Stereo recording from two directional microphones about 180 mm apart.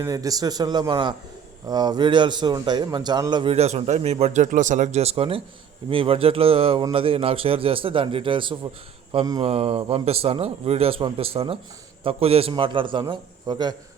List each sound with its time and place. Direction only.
0.0 s a man's voice: 20° right (ahead or behind)